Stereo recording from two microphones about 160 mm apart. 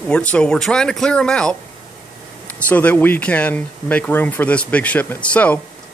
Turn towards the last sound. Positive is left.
turn(degrees=10)  # may be behind; listen again after turning